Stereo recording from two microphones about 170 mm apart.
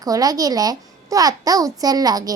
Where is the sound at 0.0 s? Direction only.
20° right (ahead or behind).